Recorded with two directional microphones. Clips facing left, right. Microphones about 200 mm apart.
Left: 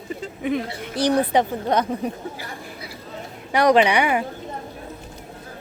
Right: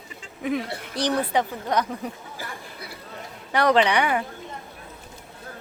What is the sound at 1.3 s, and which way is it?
Speech, 25° left (ahead or behind).